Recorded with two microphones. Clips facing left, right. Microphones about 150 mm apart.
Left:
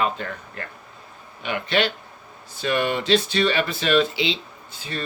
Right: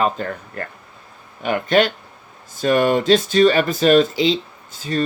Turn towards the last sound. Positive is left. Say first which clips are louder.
# right 10 dB
turn(degrees=-45)  # may be behind; listen again after turning